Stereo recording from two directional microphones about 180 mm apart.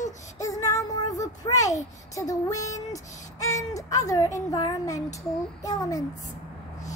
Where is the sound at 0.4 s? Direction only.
20° left (ahead or behind).